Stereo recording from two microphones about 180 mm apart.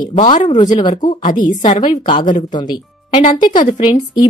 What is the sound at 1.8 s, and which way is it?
Speech, 25° left (ahead or behind).